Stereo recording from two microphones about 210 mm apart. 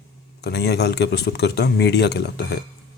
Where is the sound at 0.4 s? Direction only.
50° left (ahead or behind).